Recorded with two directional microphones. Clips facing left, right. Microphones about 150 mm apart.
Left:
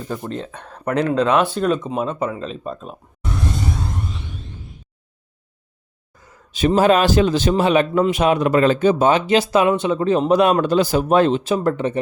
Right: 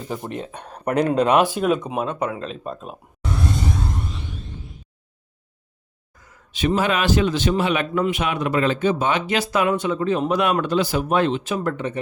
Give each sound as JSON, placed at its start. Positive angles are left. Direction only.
{"t": 0.2, "sound": "speech", "side_deg": -15}
{"t": 6.5, "sound": "a man's voice", "side_deg": 40}